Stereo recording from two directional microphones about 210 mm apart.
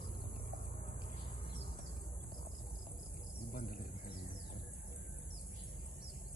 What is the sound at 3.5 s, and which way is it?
Insect, 45° left (ahead or behind).